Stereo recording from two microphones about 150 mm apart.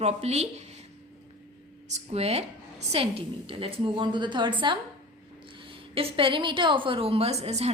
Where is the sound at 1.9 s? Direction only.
45° right (ahead or behind).